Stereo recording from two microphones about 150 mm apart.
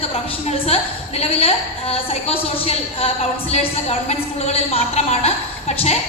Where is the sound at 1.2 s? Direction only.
40° left (ahead or behind).